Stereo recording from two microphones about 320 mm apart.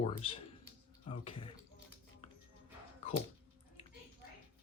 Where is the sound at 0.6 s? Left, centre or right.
Centre.